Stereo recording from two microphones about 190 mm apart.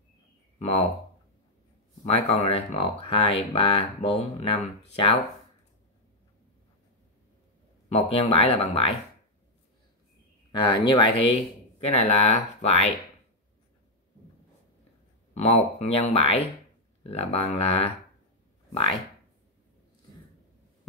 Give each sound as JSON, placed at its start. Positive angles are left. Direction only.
{"t": 0.6, "sound": "speech", "side_deg": 35}
{"t": 2.0, "sound": "speech", "side_deg": 35}
{"t": 7.9, "sound": "speech", "side_deg": 30}
{"t": 10.5, "sound": "speech", "side_deg": 25}
{"t": 15.3, "sound": "speech", "side_deg": 35}
{"t": 18.7, "sound": "a sound", "side_deg": 30}